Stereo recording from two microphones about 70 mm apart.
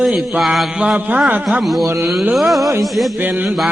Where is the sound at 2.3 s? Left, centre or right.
Centre.